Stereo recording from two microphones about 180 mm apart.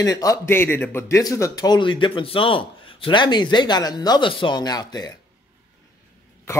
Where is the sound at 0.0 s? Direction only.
20° left (ahead or behind).